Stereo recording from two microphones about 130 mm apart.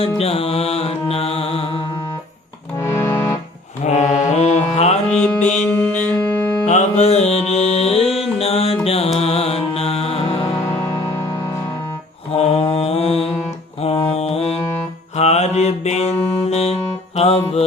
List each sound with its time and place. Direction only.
0.2 s music: 50° left (ahead or behind)
2.7 s music: 20° left (ahead or behind)
3.8 s mantra: 60° left (ahead or behind)
5.1 s music: 10° left (ahead or behind)
6.7 s music: 60° left (ahead or behind)
10.8 s music: 25° left (ahead or behind)
12.4 s mantra: 50° left (ahead or behind)
15.1 s music: 55° left (ahead or behind)